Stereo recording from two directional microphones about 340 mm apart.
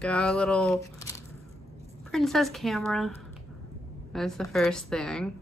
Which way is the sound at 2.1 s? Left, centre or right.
Centre.